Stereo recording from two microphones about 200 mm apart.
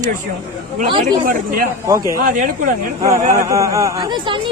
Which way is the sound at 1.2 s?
45° right (ahead or behind).